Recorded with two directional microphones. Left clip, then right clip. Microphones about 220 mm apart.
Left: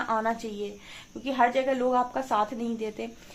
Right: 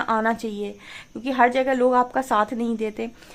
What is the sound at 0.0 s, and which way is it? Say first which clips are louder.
Speech: right 5 dB; 45° right (ahead or behind).